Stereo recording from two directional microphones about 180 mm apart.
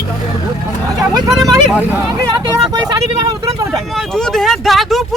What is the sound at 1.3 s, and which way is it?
Speech, centre (ahead or behind).